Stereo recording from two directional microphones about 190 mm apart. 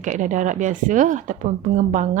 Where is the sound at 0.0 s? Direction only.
40° right (ahead or behind).